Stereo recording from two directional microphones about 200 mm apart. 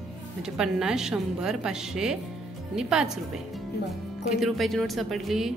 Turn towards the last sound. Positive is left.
turn(degrees=0)  # may be behind; listen again after turning